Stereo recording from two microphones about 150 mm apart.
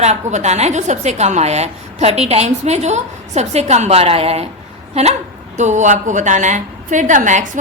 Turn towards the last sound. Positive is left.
turn(degrees=-55)  # may be behind; listen again after turning